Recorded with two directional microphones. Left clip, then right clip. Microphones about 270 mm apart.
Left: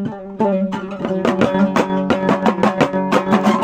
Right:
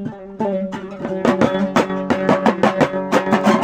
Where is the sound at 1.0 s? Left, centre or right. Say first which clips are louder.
Even; left.